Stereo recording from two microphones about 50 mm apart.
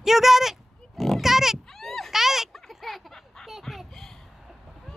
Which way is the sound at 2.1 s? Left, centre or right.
Centre.